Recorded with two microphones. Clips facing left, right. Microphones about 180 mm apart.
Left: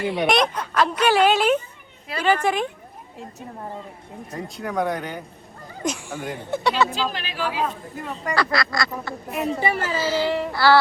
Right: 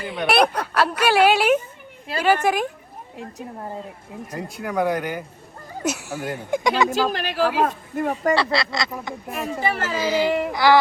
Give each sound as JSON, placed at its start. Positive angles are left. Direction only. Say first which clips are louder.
{"t": 0.0, "sound": "speech", "louder": "left 2 dB", "side_deg": 0}
{"t": 0.4, "sound": "speech", "louder": "right 3 dB", "side_deg": -65}
{"t": 0.7, "sound": "speech", "louder": "even", "side_deg": -5}
{"t": 4.3, "sound": "speech", "louder": "even", "side_deg": 0}
{"t": 6.9, "sound": "speech", "louder": "right 5 dB", "side_deg": -50}
{"t": 8.2, "sound": "speech", "louder": "even", "side_deg": -30}
{"t": 9.3, "sound": "speech", "louder": "left 2 dB", "side_deg": 15}
{"t": 9.9, "sound": "speech", "louder": "right 2 dB", "side_deg": -15}